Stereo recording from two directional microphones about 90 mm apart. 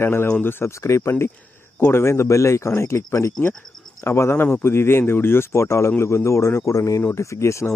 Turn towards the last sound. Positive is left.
turn(degrees=30)  # may be behind; listen again after turning